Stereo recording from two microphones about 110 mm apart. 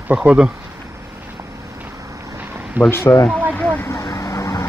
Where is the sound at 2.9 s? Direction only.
20° left (ahead or behind).